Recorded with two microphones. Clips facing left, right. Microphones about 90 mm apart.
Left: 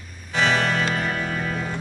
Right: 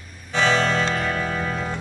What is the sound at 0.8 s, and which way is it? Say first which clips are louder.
Music: right 1 dB; 30° right (ahead or behind).